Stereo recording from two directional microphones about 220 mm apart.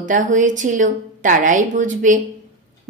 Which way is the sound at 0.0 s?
35° right (ahead or behind).